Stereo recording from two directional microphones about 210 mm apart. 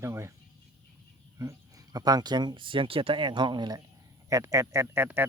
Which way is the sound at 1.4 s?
15° right (ahead or behind).